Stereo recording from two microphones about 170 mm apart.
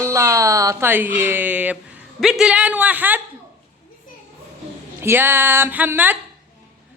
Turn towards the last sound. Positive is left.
turn(degrees=-10)  # may be behind; listen again after turning